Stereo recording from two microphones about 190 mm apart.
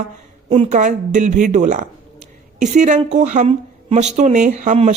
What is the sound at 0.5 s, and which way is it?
Speech, 40° right (ahead or behind).